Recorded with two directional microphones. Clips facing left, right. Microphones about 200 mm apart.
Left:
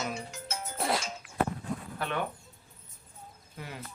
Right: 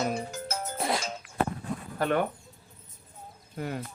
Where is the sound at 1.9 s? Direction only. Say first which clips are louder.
Right 10 dB; 45° right (ahead or behind).